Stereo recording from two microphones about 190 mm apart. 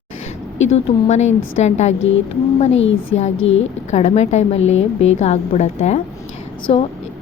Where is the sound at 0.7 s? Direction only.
35° left (ahead or behind).